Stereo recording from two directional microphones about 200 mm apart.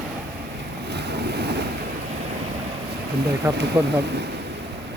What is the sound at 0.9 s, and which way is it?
Waves, 55° right (ahead or behind).